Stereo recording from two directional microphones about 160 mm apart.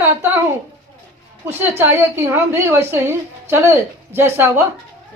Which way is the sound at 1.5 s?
15° right (ahead or behind).